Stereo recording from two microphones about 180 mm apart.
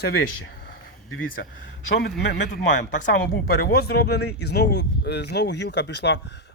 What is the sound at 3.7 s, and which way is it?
Speech, 60° left (ahead or behind).